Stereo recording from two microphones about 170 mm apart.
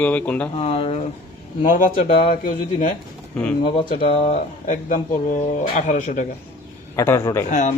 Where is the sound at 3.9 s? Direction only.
35° left (ahead or behind).